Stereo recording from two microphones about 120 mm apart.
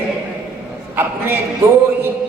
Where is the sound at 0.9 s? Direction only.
20° right (ahead or behind).